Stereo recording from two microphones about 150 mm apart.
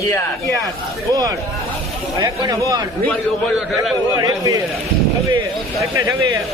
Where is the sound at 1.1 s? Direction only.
20° right (ahead or behind).